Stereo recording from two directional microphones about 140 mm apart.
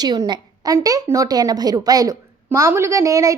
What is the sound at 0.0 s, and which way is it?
A woman's voice, 30° right (ahead or behind).